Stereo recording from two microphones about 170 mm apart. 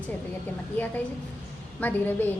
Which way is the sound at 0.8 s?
10° left (ahead or behind).